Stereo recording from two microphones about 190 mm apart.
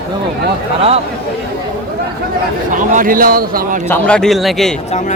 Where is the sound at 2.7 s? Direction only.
45° right (ahead or behind).